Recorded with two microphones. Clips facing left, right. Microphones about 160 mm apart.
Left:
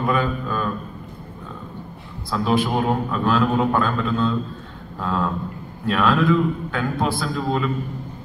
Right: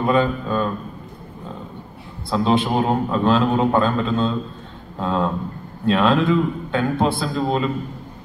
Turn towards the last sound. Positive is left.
turn(degrees=-25)  # may be behind; listen again after turning